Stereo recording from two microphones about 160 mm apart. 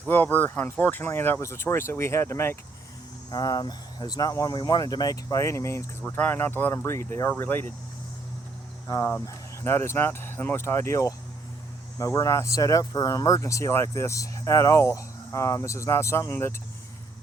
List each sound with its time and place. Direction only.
0.1 s speech: 10° left (ahead or behind)
8.9 s speech: 15° left (ahead or behind)